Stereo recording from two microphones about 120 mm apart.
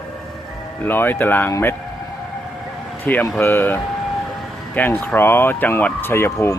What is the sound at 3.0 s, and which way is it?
Speech, 15° left (ahead or behind).